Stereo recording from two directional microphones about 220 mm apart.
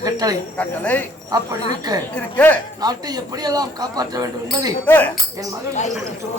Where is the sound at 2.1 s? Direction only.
5° left (ahead or behind).